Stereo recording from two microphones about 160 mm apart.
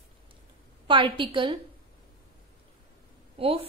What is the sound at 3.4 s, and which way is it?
Speech, 35° right (ahead or behind).